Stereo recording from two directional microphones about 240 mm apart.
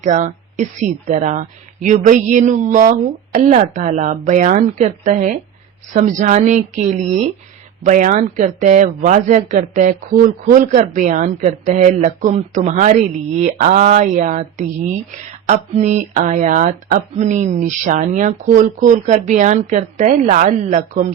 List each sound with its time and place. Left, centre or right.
0.0 s speech: right